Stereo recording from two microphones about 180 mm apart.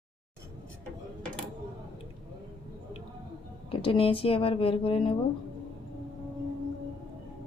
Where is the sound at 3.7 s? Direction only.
30° left (ahead or behind).